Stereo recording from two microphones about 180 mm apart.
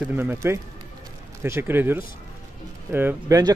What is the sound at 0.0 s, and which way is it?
A man's voice, 10° right (ahead or behind).